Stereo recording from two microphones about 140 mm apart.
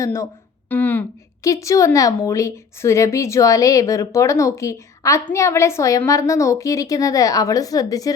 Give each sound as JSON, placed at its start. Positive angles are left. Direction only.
{"t": 0.0, "sound": "a woman's voice", "side_deg": 20}